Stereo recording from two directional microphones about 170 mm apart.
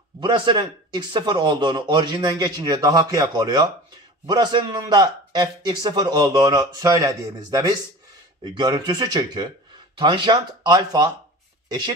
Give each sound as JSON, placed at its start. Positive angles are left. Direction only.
{"t": 0.2, "sound": "speech", "side_deg": -25}